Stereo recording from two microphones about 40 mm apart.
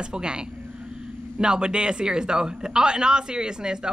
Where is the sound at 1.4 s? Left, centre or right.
Right.